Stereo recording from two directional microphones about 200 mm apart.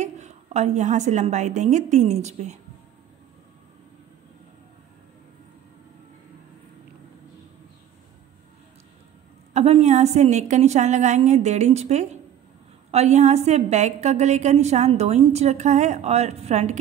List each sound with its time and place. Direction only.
0.0 s a woman's voice: 35° right (ahead or behind)
9.5 s a woman's voice: 35° right (ahead or behind)